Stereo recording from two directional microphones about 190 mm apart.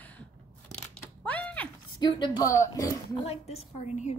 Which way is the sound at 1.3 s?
5° left (ahead or behind).